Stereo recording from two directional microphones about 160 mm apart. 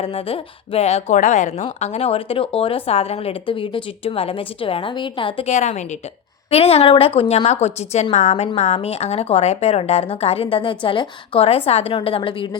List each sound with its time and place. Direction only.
0.0 s speech: 35° left (ahead or behind)